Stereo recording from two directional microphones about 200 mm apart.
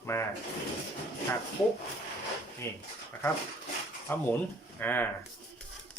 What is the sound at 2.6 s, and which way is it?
Speech, 10° left (ahead or behind).